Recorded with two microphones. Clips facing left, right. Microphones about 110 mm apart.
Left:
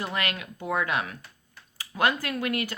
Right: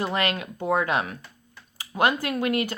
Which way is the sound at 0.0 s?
30° right (ahead or behind).